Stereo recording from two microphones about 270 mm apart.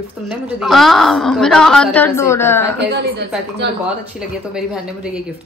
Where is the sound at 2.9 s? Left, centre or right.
Right.